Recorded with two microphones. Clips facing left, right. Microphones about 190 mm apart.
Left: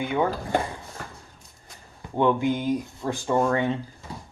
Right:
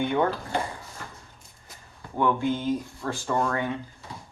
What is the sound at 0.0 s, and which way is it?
Speech, 5° left (ahead or behind).